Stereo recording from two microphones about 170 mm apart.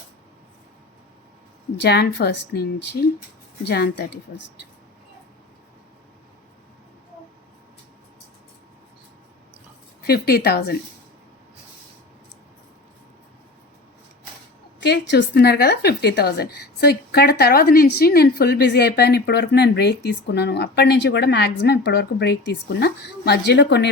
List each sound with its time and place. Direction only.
1.8 s a woman's voice: 70° left (ahead or behind)
10.1 s a woman's voice: 65° left (ahead or behind)
14.8 s a woman's voice: 80° left